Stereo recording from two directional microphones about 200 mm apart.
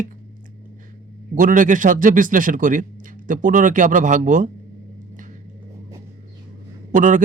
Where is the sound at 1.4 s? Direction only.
40° right (ahead or behind).